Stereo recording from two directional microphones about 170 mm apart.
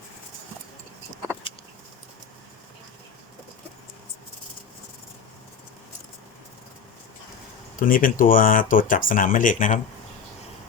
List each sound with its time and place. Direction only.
7.8 s speech: 55° left (ahead or behind)